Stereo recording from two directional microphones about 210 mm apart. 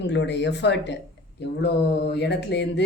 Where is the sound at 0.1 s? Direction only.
55° left (ahead or behind).